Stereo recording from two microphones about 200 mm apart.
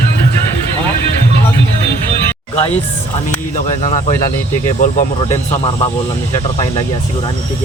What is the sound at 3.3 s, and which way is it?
Speech, 35° left (ahead or behind).